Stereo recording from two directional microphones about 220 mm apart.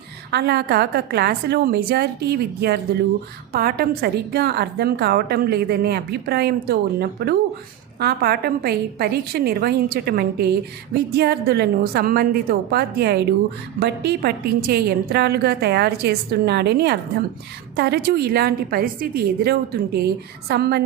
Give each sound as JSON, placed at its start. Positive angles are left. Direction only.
{"t": 0.3, "sound": "a woman's voice", "side_deg": -45}